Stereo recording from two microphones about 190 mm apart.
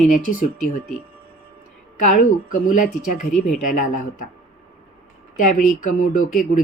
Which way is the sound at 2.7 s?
45° left (ahead or behind).